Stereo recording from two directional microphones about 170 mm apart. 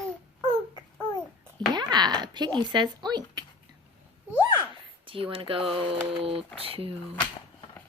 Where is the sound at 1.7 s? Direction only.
25° right (ahead or behind).